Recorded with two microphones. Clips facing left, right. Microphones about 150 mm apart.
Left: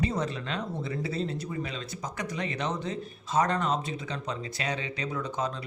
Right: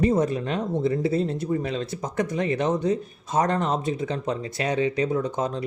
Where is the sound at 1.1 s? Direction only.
50° right (ahead or behind).